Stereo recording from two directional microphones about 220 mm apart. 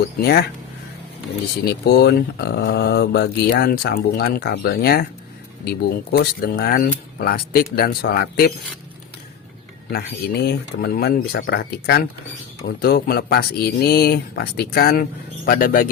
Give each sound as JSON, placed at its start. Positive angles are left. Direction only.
{"t": 0.2, "sound": "speech", "side_deg": 45}
{"t": 1.6, "sound": "speech", "side_deg": 45}
{"t": 10.4, "sound": "speech", "side_deg": 45}